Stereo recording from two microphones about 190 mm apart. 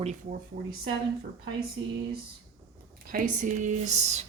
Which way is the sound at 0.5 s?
85° right.